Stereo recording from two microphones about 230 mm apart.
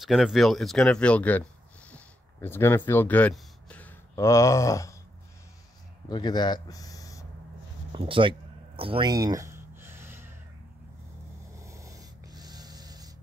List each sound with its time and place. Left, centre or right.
0.0 s speech: centre
6.0 s speech: centre
7.9 s a sound: right
11.5 s snort: centre